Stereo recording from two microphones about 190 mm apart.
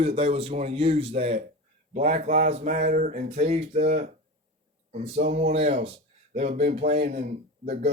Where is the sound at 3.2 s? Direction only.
35° right (ahead or behind).